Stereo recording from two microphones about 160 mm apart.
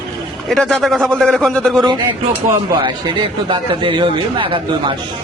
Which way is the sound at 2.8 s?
30° right (ahead or behind).